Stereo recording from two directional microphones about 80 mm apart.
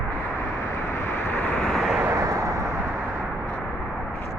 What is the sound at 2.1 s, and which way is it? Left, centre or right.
Vehicle, right.